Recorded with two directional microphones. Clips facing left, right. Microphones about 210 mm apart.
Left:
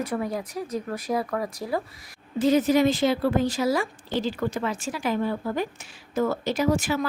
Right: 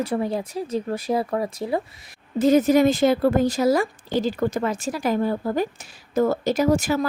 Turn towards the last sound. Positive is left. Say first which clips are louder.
# right 4 dB
turn(degrees=-40)  # may be behind; listen again after turning